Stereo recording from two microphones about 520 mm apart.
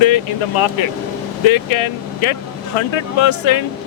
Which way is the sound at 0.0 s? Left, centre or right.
Left.